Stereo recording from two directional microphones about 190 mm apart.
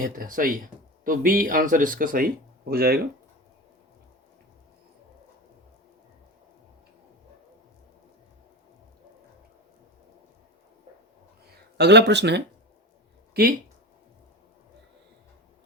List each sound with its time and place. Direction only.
0.0 s speech: 45° right (ahead or behind)
11.8 s speech: 65° right (ahead or behind)